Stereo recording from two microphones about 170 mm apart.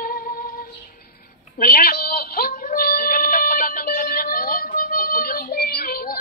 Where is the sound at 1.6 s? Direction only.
60° left (ahead or behind).